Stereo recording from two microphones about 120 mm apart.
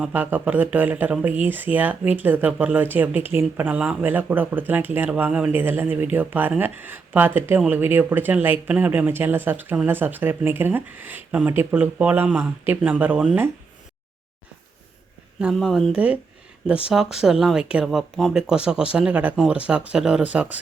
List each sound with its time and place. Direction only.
0.0 s speech: 15° right (ahead or behind)
15.5 s speech: centre (ahead or behind)